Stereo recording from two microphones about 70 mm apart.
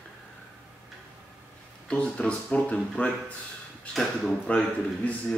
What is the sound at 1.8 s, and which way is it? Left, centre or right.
Speech, centre.